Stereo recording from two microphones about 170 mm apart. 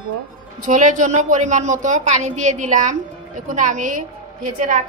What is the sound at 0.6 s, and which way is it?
A woman's voice, 50° right (ahead or behind).